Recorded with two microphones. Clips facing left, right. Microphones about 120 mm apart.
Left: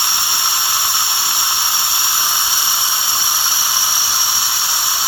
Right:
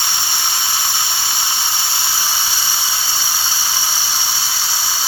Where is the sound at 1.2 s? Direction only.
15° left (ahead or behind).